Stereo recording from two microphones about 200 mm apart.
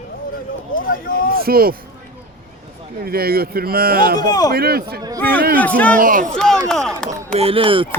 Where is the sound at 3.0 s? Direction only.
50° right (ahead or behind).